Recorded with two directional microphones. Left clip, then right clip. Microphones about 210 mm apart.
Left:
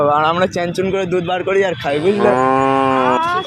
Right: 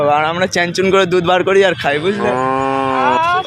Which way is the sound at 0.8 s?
40° right (ahead or behind).